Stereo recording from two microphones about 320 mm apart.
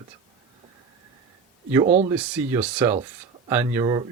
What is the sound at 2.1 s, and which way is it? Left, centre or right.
Speech, centre.